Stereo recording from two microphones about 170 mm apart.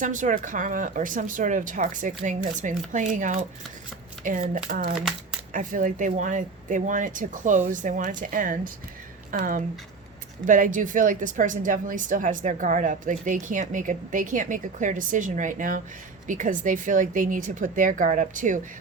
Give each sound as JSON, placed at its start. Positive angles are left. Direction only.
{"t": 0.0, "sound": "a woman's voice", "side_deg": -50}